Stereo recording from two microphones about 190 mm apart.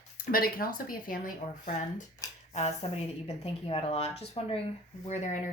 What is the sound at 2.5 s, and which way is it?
Speech, 35° left (ahead or behind).